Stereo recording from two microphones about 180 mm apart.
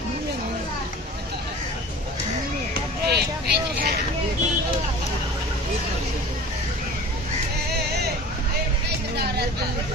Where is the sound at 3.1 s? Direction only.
65° right (ahead or behind).